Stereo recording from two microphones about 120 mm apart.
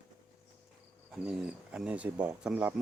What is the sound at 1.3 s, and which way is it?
Speech, 5° right (ahead or behind).